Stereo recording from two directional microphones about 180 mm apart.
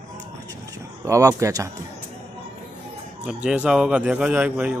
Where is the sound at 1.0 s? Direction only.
20° right (ahead or behind).